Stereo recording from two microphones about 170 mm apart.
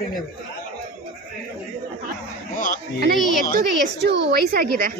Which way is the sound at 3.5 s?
80° right.